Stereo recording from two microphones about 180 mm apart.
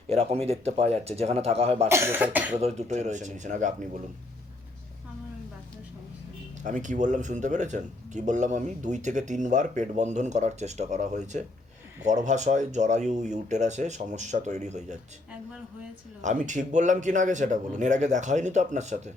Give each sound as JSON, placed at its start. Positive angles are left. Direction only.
{"t": 0.1, "sound": "speech", "side_deg": -35}
{"t": 1.9, "sound": "speech", "side_deg": -10}
{"t": 2.6, "sound": "speech", "side_deg": -35}
{"t": 6.6, "sound": "speech", "side_deg": -45}
{"t": 16.2, "sound": "speech", "side_deg": -45}